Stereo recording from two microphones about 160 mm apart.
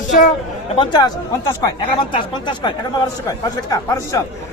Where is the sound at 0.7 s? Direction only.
30° left (ahead or behind).